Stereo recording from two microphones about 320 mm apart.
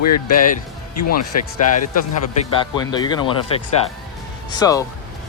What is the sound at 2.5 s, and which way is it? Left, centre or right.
Speech, centre.